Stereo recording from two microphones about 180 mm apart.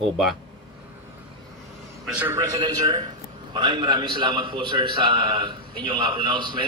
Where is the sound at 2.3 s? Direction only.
20° right (ahead or behind).